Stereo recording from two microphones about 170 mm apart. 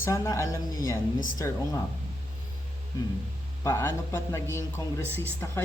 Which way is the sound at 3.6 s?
15° left (ahead or behind).